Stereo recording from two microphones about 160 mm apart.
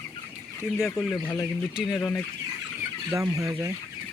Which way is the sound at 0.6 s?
15° left (ahead or behind).